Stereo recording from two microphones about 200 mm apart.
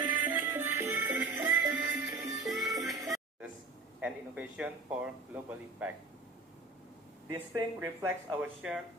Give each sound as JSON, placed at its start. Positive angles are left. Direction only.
{"t": 0.0, "sound": "music", "side_deg": -10}
{"t": 2.4, "sound": "music", "side_deg": 0}
{"t": 4.0, "sound": "a man's voice", "side_deg": -5}
{"t": 7.3, "sound": "a man's voice", "side_deg": -15}
{"t": 8.4, "sound": "speech", "side_deg": -5}